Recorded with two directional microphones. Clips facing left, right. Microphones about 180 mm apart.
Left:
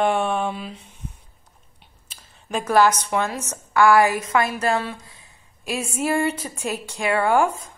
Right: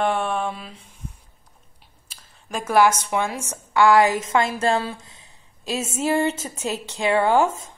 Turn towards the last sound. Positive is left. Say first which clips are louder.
# even
turn(degrees=-20)  # may be behind; listen again after turning